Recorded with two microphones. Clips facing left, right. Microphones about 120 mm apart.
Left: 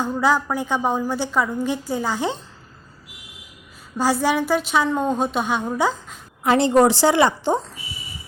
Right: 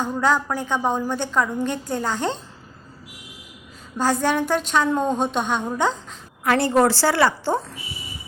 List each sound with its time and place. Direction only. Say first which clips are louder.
0.0 s a woman's voice: left 1 dB; 10° left (ahead or behind)
3.9 s a woman's voice: left 1 dB; 10° left (ahead or behind)
6.4 s a woman's voice: left 2 dB; 20° left (ahead or behind)